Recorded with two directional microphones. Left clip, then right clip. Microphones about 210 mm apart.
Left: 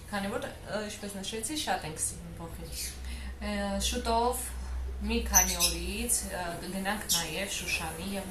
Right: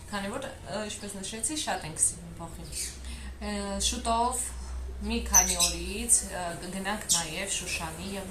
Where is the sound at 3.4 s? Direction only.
5° right (ahead or behind).